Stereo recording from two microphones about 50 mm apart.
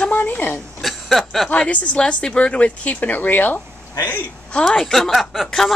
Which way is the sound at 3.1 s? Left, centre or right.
Left.